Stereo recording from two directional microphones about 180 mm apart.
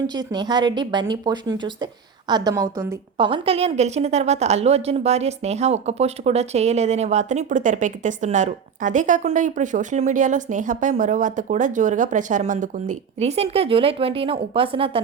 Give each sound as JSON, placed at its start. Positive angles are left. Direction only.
{"t": 0.1, "sound": "speech", "side_deg": -20}